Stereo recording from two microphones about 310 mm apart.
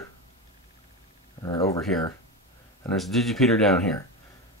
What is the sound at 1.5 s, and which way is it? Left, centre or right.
Speech, centre.